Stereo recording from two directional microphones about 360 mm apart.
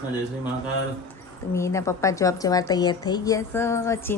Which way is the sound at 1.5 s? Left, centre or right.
Centre.